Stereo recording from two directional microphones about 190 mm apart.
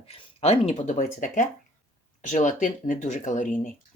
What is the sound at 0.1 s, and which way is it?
Speech, 30° left (ahead or behind).